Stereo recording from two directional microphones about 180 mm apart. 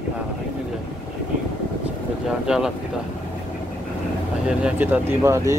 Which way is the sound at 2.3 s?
5° right (ahead or behind).